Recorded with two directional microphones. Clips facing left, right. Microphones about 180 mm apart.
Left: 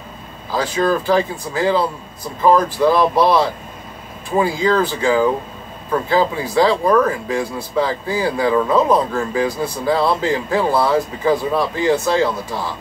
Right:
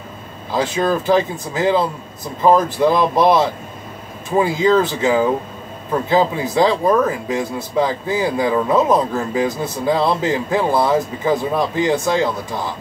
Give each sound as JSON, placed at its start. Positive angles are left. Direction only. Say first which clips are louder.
{"t": 0.6, "sound": "speech", "louder": "even", "side_deg": -20}